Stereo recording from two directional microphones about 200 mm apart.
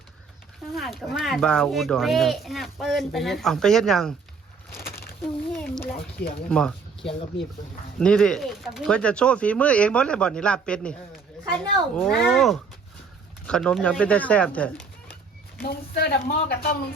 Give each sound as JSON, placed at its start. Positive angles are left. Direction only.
{"t": 0.8, "sound": "a child's voice", "side_deg": 0}
{"t": 7.0, "sound": "speech", "side_deg": 30}
{"t": 7.9, "sound": "a child's voice", "side_deg": 5}
{"t": 11.9, "sound": "a child's voice", "side_deg": 5}
{"t": 15.6, "sound": "speech", "side_deg": 50}